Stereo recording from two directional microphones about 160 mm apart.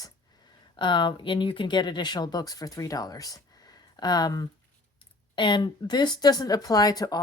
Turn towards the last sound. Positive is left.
turn(degrees=25)  # may be behind; listen again after turning